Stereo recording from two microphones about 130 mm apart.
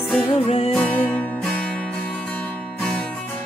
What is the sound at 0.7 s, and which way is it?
Music, 10° left (ahead or behind).